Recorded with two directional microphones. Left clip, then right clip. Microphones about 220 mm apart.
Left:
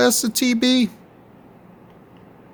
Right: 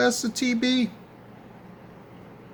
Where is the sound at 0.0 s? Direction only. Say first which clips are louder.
Left 5 dB; 50° left (ahead or behind).